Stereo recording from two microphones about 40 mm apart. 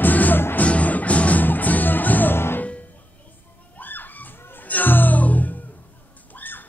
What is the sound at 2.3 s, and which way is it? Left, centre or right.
Music, left.